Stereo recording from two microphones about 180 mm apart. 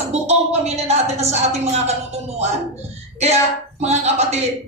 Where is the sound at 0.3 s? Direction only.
35° right (ahead or behind).